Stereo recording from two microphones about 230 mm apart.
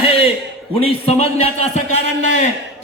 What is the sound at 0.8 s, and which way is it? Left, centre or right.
A man's voice, left.